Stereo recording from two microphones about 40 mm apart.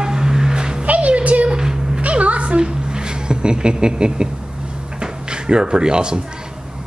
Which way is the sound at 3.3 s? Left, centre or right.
Right.